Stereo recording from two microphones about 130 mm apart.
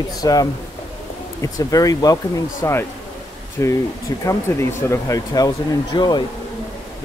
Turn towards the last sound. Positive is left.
turn(degrees=35)  # may be behind; listen again after turning